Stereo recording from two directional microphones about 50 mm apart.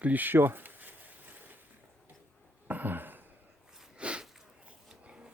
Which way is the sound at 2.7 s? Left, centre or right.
Right.